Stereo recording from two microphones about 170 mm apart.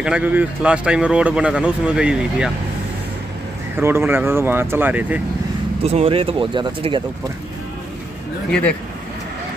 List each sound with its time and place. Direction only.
0.0 s speech: 5° right (ahead or behind)
3.7 s speech: 15° right (ahead or behind)
5.8 s speech: 35° right (ahead or behind)
8.5 s speech: 5° left (ahead or behind)